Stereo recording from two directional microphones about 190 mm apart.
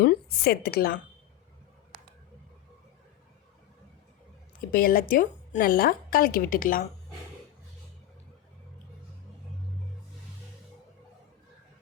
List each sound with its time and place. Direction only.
0.0 s a woman's voice: 55° left (ahead or behind)
4.7 s a woman's voice: 50° left (ahead or behind)